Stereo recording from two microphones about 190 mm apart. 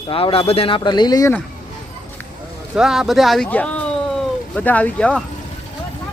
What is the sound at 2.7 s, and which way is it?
Speech, centre (ahead or behind).